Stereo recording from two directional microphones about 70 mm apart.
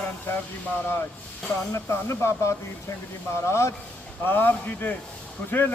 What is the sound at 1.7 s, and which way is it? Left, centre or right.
Speech, left.